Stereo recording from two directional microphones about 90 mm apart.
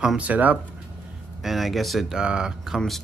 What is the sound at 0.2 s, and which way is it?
Speech, 15° right (ahead or behind).